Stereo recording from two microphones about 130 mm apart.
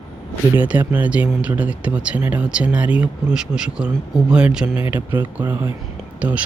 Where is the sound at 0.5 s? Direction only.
15° right (ahead or behind).